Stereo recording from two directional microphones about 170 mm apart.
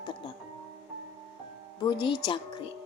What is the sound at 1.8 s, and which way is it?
Speech, 25° left (ahead or behind).